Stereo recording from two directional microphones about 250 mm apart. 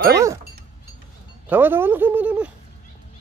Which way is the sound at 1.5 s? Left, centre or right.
Centre.